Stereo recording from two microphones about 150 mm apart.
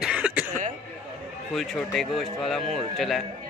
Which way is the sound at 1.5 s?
Centre (ahead or behind).